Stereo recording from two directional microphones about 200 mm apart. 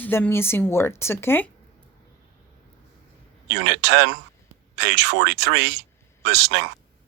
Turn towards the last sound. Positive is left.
turn(degrees=-70)  # may be behind; listen again after turning